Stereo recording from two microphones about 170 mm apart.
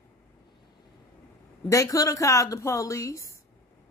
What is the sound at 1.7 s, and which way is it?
Speech, 20° left (ahead or behind).